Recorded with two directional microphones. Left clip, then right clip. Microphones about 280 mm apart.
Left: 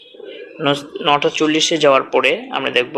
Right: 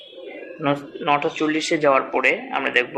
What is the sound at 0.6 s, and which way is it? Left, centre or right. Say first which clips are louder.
Speech: left 5 dB; centre.